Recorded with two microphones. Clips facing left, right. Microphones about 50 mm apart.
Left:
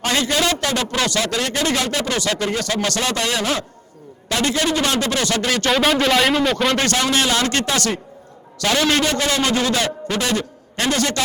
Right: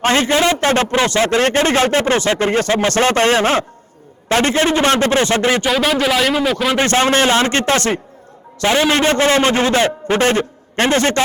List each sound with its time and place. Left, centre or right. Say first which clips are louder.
0.0 s a man's voice: right 5 dB; right
5.6 s speech: right 1 dB; centre
6.7 s a man's voice: right 5 dB; right